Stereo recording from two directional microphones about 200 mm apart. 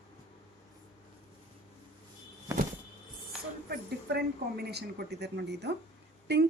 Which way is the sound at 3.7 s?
55° right (ahead or behind).